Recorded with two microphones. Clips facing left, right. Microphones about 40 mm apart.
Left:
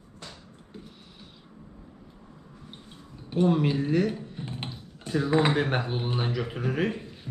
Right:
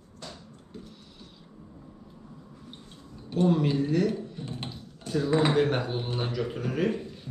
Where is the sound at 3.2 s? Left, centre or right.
Centre.